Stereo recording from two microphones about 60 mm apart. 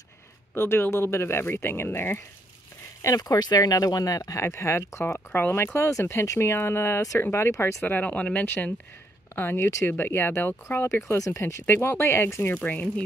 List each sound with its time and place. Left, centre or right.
0.6 s speech: left
3.0 s speech: left
5.3 s speech: left
5.9 s speech: left
7.8 s speech: left
9.3 s speech: left
10.9 s speech: left
11.6 s speech: left
12.6 s speech: left